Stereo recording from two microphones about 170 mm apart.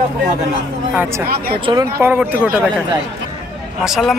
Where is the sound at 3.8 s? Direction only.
Centre (ahead or behind).